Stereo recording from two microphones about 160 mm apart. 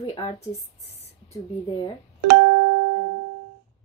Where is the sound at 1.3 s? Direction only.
25° left (ahead or behind).